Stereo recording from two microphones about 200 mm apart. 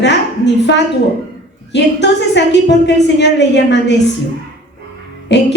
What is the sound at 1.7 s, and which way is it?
A woman's voice, 60° left (ahead or behind).